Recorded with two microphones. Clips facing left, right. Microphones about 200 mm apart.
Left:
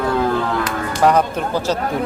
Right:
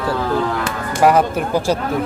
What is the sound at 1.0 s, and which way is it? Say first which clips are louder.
Speech: right 2 dB; 10° right (ahead or behind).